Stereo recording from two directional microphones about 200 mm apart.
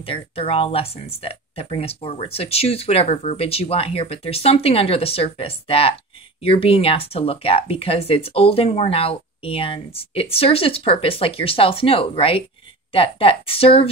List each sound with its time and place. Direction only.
0.0 s speech: 30° left (ahead or behind)